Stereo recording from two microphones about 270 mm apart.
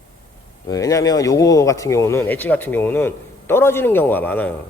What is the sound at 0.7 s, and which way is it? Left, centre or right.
Speech, centre.